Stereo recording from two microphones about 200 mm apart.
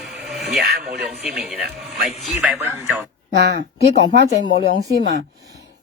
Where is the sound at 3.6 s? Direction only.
40° left (ahead or behind).